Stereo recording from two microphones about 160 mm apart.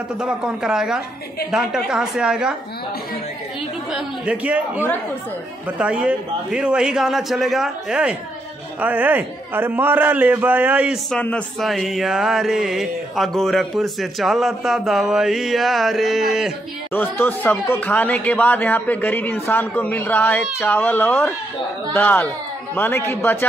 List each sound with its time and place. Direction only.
0.2 s speech: 5° right (ahead or behind)
3.9 s a man's voice: 10° right (ahead or behind)
11.1 s speech: 10° left (ahead or behind)
16.9 s speech: 15° left (ahead or behind)